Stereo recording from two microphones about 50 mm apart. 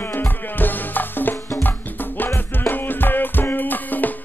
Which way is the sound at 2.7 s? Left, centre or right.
Left.